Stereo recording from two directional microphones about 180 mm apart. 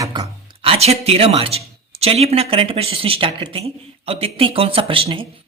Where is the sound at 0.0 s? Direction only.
25° right (ahead or behind).